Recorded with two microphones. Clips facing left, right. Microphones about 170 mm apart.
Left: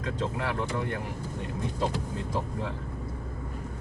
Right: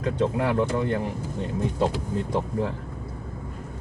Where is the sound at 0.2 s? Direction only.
55° right (ahead or behind).